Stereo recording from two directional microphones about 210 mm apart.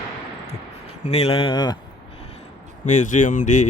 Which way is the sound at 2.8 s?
35° left (ahead or behind).